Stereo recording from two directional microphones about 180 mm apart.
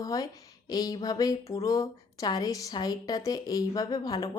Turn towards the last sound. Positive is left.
turn(degrees=20)  # may be behind; listen again after turning